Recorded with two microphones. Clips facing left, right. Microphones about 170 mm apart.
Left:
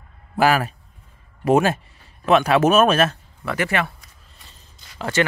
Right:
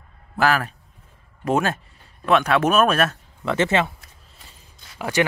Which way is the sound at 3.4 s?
20° right (ahead or behind).